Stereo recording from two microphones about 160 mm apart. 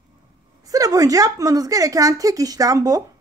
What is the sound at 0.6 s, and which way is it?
A woman's voice, 20° right (ahead or behind).